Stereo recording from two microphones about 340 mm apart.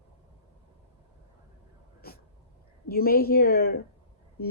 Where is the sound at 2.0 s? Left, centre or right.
Left.